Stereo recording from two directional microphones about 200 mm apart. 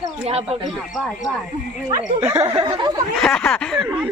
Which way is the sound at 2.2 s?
15° right (ahead or behind).